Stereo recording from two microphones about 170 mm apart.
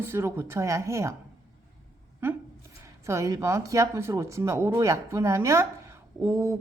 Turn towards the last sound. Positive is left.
turn(degrees=-15)  # may be behind; listen again after turning